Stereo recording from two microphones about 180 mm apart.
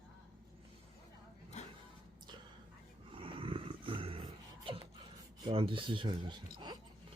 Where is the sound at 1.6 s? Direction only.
40° left (ahead or behind).